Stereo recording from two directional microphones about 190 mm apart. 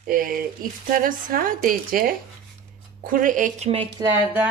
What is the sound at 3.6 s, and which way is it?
Speech, 30° right (ahead or behind).